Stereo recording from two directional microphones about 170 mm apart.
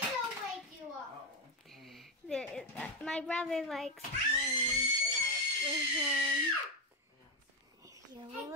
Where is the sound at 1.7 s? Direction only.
Centre (ahead or behind).